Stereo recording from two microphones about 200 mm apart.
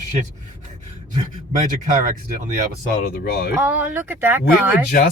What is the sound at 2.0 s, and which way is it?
Speech, 40° right (ahead or behind).